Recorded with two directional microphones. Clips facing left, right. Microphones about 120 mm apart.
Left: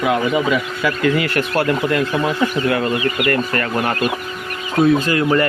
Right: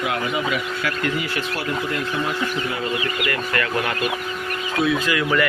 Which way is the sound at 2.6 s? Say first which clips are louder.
Left 7 dB; 60° left (ahead or behind).